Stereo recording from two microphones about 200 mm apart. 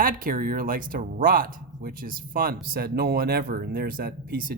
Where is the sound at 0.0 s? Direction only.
45° right (ahead or behind).